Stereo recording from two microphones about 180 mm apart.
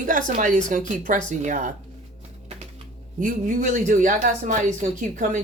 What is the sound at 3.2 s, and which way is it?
Speech, 45° right (ahead or behind).